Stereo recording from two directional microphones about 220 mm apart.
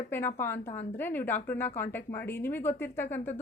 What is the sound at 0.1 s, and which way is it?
A woman's voice, 10° left (ahead or behind).